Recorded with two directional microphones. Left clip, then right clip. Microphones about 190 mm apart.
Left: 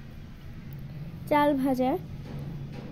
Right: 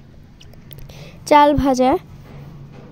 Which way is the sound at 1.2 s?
60° right (ahead or behind).